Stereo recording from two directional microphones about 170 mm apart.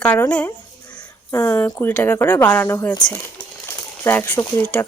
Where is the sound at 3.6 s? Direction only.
10° left (ahead or behind).